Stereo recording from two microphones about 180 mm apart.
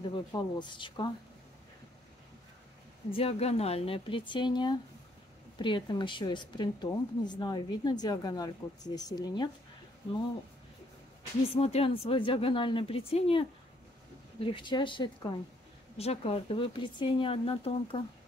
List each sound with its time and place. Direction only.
0.3 s a woman's voice: 25° left (ahead or behind)
3.1 s a woman's voice: 35° left (ahead or behind)
11.4 s a woman's voice: 35° left (ahead or behind)